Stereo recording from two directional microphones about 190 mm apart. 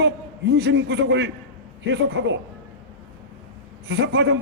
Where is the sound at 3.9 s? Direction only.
60° right (ahead or behind).